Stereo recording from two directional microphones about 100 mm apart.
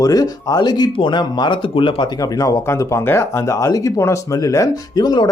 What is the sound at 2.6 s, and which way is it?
Speech, 30° left (ahead or behind).